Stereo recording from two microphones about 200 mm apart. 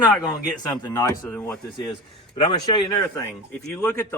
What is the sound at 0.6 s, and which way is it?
Speech, 20° left (ahead or behind).